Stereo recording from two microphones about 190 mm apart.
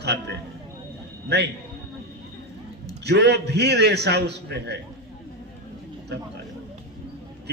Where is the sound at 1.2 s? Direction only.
60° right (ahead or behind).